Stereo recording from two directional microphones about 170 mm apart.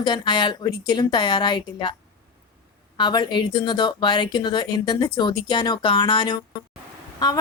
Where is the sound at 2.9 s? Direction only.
25° left (ahead or behind).